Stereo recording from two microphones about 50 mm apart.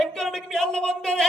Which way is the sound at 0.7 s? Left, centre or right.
Centre.